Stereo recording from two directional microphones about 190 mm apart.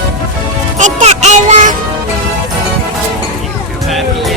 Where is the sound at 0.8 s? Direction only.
40° right (ahead or behind).